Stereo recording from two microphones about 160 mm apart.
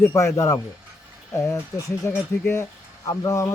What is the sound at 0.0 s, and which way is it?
A man's voice, 15° left (ahead or behind).